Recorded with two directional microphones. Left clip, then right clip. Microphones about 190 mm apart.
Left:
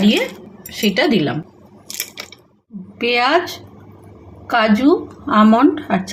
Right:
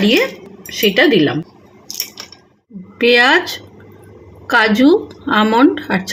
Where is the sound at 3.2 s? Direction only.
35° right (ahead or behind).